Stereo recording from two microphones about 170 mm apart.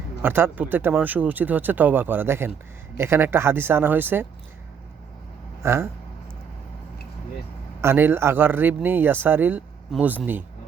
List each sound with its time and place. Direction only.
0.2 s speech: 15° right (ahead or behind)
5.6 s speech: 15° right (ahead or behind)
7.8 s speech: 15° right (ahead or behind)